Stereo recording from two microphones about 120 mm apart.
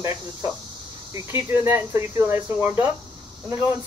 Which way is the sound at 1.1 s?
20° right (ahead or behind).